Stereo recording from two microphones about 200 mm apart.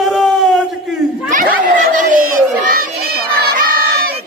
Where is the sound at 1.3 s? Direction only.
40° right (ahead or behind).